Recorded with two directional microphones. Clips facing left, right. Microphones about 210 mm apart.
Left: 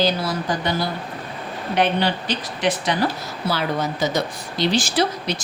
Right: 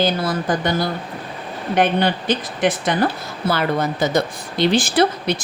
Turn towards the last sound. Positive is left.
turn(degrees=-55)  # may be behind; listen again after turning